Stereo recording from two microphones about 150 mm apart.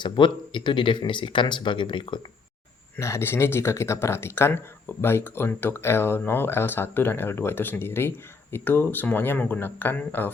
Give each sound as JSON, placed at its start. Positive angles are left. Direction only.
{"t": 0.0, "sound": "speech", "side_deg": 30}
{"t": 3.0, "sound": "speech", "side_deg": 20}